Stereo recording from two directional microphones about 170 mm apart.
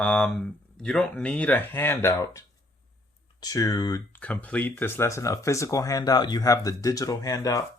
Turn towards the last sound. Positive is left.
turn(degrees=20)  # may be behind; listen again after turning